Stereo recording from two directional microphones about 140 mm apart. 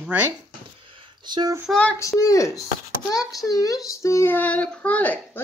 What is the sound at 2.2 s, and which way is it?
A child's voice, 25° left (ahead or behind).